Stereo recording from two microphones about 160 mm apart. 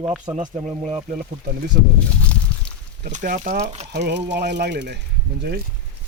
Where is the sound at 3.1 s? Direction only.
50° right (ahead or behind).